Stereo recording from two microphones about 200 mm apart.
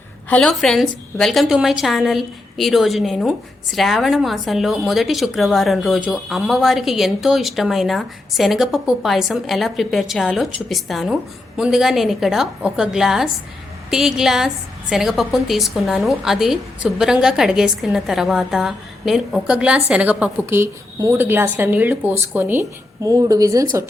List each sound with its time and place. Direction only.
0.3 s a woman's voice: 5° left (ahead or behind); by 23.6 s 15° right (ahead or behind)